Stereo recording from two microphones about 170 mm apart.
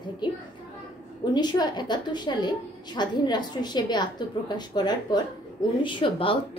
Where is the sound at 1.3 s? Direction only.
25° left (ahead or behind).